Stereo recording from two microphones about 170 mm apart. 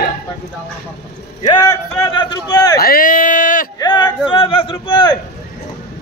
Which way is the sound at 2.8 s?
55° left (ahead or behind).